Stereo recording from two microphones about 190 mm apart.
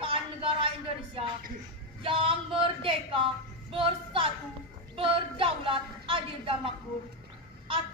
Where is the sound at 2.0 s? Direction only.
25° right (ahead or behind).